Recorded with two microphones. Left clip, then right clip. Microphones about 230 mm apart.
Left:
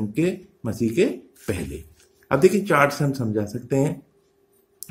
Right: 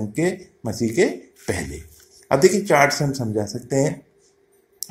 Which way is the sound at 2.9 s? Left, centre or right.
Left.